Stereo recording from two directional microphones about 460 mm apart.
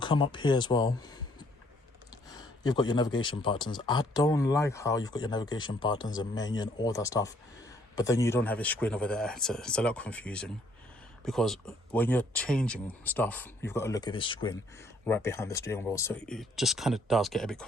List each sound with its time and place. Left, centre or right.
0.0 s speech: centre